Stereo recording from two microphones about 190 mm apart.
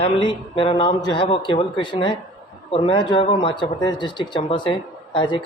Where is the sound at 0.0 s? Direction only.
25° left (ahead or behind).